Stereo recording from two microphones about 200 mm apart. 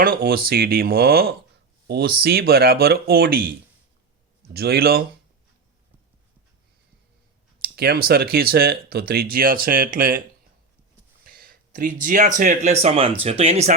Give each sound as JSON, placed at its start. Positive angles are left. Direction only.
{"t": 0.0, "sound": "speech", "side_deg": -50}
{"t": 4.5, "sound": "speech", "side_deg": -50}
{"t": 7.6, "sound": "speech", "side_deg": -50}
{"t": 11.3, "sound": "speech", "side_deg": -45}